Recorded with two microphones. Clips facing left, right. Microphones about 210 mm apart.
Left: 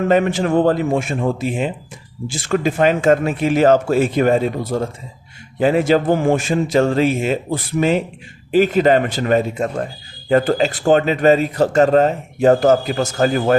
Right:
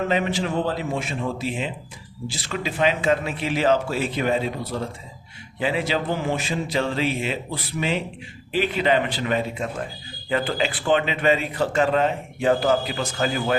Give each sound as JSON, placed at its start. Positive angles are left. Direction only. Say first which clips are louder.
{"t": 0.1, "sound": "speech", "louder": "left 8 dB", "side_deg": 50}